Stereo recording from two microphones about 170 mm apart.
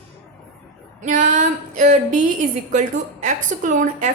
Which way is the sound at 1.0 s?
45° right (ahead or behind).